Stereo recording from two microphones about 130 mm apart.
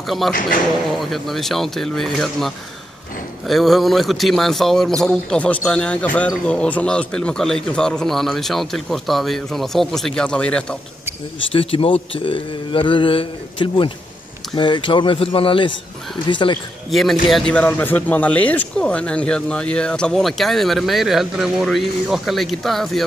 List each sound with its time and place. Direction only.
0.0 s a man's voice: centre (ahead or behind)
11.5 s speech: 45° left (ahead or behind)
16.9 s a man's voice: centre (ahead or behind)